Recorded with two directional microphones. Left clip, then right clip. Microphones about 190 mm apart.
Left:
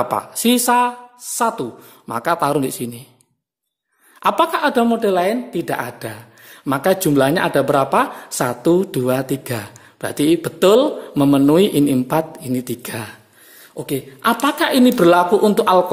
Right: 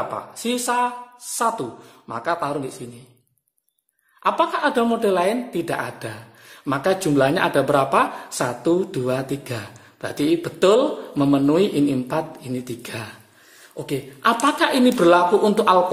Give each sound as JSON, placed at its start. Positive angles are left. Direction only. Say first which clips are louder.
{"t": 0.1, "sound": "a woman's voice", "louder": "left 8 dB", "side_deg": 45}
{"t": 4.2, "sound": "a woman's voice", "louder": "left 4 dB", "side_deg": 45}